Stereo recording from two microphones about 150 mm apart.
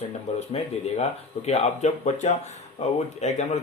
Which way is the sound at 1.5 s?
50° left (ahead or behind).